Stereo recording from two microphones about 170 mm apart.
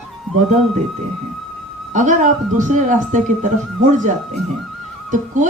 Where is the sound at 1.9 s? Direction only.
50° right (ahead or behind).